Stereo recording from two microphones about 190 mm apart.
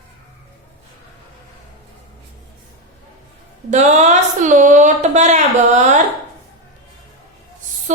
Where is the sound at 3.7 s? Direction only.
35° right (ahead or behind).